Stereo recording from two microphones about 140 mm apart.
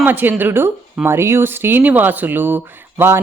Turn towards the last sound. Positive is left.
turn(degrees=-15)  # may be behind; listen again after turning